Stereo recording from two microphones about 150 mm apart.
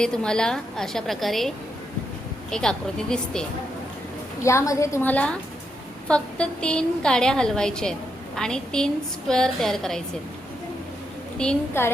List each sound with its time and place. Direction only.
0.0 s a woman's voice: 5° left (ahead or behind)
4.4 s a woman's voice: 20° left (ahead or behind); by 10.0 s 5° left (ahead or behind)
11.3 s a woman's voice: 10° left (ahead or behind)